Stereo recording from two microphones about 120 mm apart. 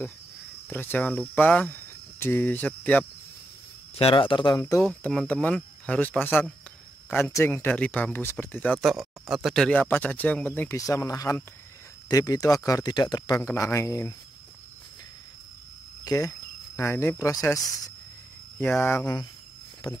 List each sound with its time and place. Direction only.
0.7 s speech: 15° left (ahead or behind)
3.9 s speech: 50° left (ahead or behind)
4.6 s speech: 25° left (ahead or behind)
8.7 s speech: centre (ahead or behind)
9.7 s speech: 15° left (ahead or behind)
10.8 s speech: 30° left (ahead or behind)
13.4 s speech: 20° left (ahead or behind)
16.0 s speech: 30° left (ahead or behind)
18.6 s speech: 15° left (ahead or behind)